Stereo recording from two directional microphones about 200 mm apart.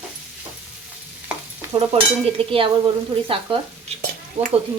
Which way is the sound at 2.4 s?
25° right (ahead or behind).